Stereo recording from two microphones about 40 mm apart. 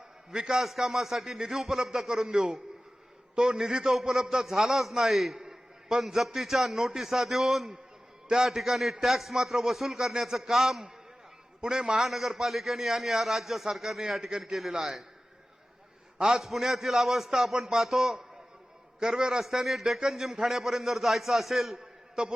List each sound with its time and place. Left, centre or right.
0.3 s a man's voice: centre
0.6 s a man's voice: centre
5.4 s a sound: centre
6.0 s a man's voice: centre
11.9 s a man's voice: centre
14.3 s a man's voice: centre
16.1 s a man's voice: centre
19.4 s a man's voice: centre